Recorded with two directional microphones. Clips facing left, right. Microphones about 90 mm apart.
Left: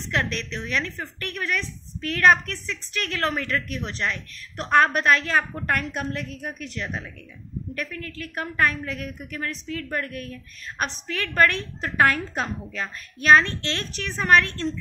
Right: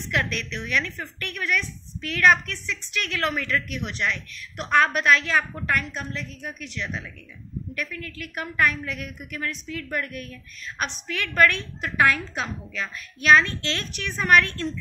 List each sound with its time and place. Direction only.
0.1 s a woman's voice: 30° left (ahead or behind)
5.7 s a woman's voice: 55° left (ahead or behind); by 14.7 s 30° left (ahead or behind)